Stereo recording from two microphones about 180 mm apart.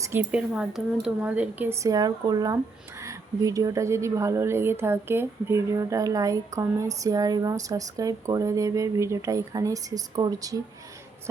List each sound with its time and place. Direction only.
0.0 s speech: 10° right (ahead or behind)